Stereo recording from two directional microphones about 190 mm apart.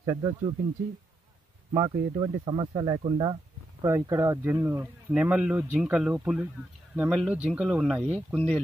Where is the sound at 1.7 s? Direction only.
20° right (ahead or behind).